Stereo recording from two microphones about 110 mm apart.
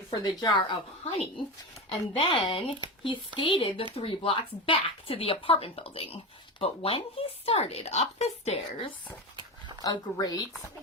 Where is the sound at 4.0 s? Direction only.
55° left (ahead or behind); by 8.6 s 85° left.